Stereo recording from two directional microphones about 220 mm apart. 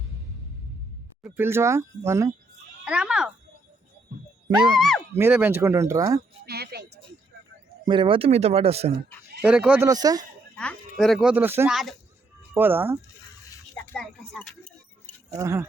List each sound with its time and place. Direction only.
1.2 s speech: 10° right (ahead or behind)
4.7 s speech: centre (ahead or behind)
6.4 s music: 45° right (ahead or behind)
7.9 s speech: 20° right (ahead or behind)
9.4 s speech: 5° right (ahead or behind)
10.5 s speech: 5° left (ahead or behind)
13.9 s speech: 5° left (ahead or behind)
15.4 s speech: 15° right (ahead or behind)